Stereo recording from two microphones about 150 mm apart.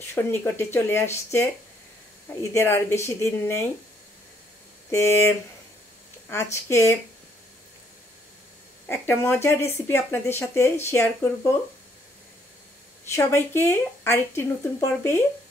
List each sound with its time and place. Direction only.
0.1 s speech: 15° left (ahead or behind)
2.5 s speech: 15° left (ahead or behind)
4.9 s speech: 20° left (ahead or behind)
8.8 s speech: 15° left (ahead or behind)
13.1 s speech: 20° left (ahead or behind)